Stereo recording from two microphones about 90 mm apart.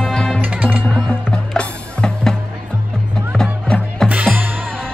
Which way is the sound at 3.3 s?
5° left (ahead or behind).